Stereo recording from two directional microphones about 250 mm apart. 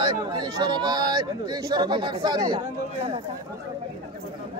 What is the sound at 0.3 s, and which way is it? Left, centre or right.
Speech, centre.